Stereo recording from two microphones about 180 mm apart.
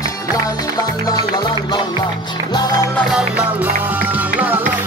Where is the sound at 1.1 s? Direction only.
25° left (ahead or behind).